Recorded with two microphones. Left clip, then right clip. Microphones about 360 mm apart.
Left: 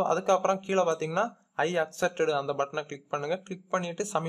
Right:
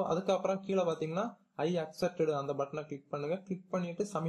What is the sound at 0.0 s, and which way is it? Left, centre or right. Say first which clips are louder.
Speech: left 7 dB; left.